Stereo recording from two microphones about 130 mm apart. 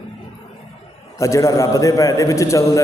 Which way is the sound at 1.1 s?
25° left (ahead or behind).